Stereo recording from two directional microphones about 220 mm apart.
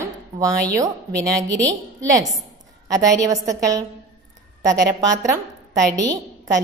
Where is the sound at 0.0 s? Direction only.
15° right (ahead or behind).